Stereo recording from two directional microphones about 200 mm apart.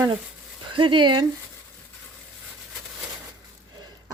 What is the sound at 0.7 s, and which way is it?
Speech, 25° right (ahead or behind).